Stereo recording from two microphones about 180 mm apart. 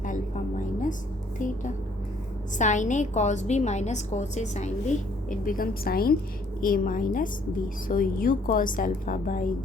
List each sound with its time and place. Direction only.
0.0 s music: 45° left (ahead or behind)
1.4 s a woman's voice: 45° left (ahead or behind)